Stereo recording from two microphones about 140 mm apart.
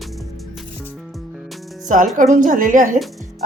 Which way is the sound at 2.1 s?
65° right (ahead or behind).